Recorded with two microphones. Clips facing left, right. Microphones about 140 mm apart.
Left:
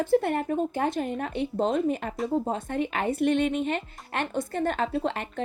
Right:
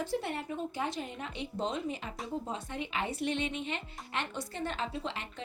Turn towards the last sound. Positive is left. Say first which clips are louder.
# left 10 dB
turn(degrees=50)  # may be behind; listen again after turning